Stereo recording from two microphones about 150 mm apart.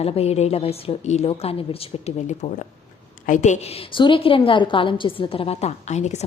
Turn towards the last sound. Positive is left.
turn(degrees=50)  # may be behind; listen again after turning